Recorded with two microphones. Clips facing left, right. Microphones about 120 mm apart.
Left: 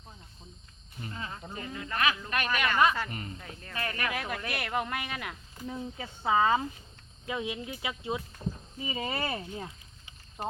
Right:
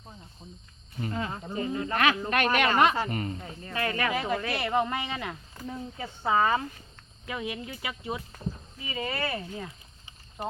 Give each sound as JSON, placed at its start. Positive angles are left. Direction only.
{"t": 1.0, "sound": "speech", "side_deg": -35}
{"t": 1.9, "sound": "a man's voice", "side_deg": -40}
{"t": 3.7, "sound": "speech", "side_deg": -25}
{"t": 4.1, "sound": "speech", "side_deg": 0}